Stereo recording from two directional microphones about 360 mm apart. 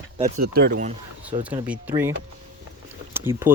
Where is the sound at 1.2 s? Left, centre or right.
Centre.